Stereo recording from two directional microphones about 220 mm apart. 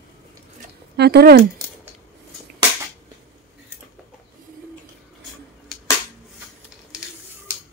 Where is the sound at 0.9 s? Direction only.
45° right (ahead or behind).